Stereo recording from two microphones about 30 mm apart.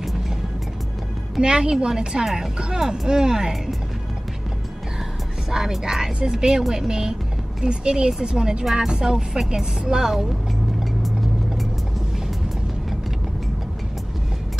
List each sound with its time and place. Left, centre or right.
1.4 s speech: right
5.5 s speech: centre
10.8 s vehicle: centre